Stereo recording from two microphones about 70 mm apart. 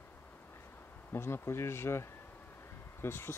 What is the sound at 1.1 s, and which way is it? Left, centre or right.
Speech, left.